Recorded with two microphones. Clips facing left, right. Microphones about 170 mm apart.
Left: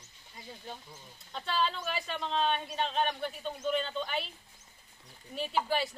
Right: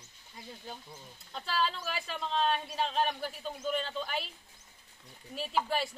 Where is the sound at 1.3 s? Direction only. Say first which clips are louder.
Left 1 dB; centre (ahead or behind).